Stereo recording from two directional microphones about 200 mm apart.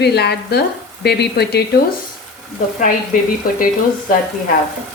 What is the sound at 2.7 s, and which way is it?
Speech, 40° left (ahead or behind).